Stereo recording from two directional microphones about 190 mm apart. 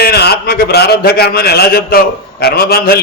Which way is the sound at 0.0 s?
55° left (ahead or behind).